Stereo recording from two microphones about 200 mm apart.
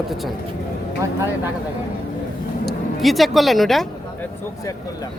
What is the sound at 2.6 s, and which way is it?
Speech, centre (ahead or behind).